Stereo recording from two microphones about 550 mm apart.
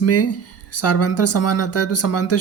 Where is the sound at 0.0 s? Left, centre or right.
Left.